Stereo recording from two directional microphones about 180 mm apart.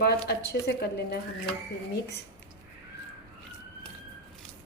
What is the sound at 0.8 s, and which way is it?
Speech, 65° left (ahead or behind).